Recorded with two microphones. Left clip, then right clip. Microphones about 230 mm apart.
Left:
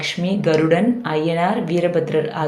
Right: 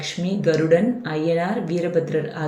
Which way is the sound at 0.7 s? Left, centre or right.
Left.